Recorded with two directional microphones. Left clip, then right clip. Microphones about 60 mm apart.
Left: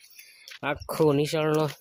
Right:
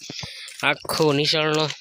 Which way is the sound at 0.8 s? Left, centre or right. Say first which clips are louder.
Left 1 dB; centre.